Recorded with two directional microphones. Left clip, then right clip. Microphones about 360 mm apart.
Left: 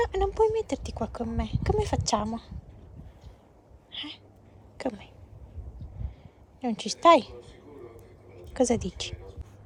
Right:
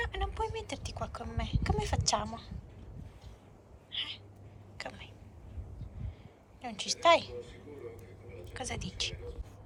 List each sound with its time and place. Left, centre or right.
0.0 s speech: centre
3.9 s a sound: centre
4.8 s speech: centre
6.6 s speech: centre
8.5 s speech: left